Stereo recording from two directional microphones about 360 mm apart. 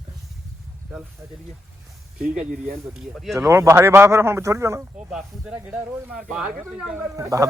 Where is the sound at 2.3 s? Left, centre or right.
Right.